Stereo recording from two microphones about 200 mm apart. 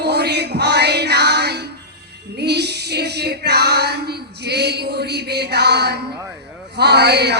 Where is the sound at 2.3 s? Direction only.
55° right (ahead or behind).